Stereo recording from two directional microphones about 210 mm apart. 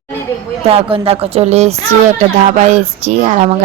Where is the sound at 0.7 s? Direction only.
25° right (ahead or behind).